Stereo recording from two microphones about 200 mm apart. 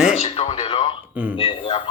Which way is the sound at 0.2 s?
30° left (ahead or behind).